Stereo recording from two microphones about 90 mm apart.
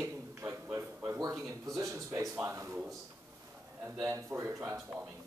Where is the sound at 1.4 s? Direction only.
35° right (ahead or behind).